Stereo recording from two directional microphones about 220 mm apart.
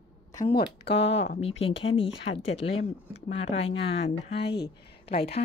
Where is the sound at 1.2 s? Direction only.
30° left (ahead or behind).